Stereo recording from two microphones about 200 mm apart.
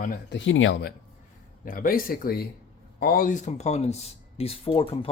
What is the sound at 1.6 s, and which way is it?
Speech, 45° left (ahead or behind).